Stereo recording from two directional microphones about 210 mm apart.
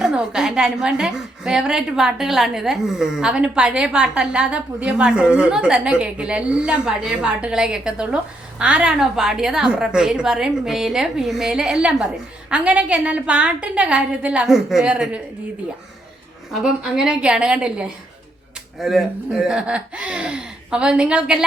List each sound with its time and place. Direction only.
0.0 s a woman's voice: 5° right (ahead or behind)
16.5 s a woman's voice: centre (ahead or behind)